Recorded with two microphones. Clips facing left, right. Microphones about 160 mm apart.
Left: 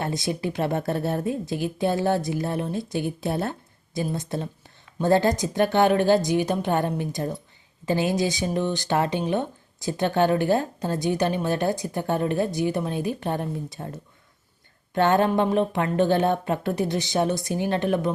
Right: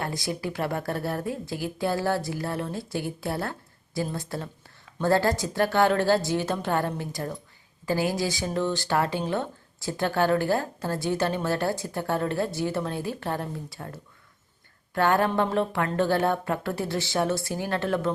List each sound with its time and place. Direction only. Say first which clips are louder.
0.0 s speech: left 3 dB; 20° left (ahead or behind)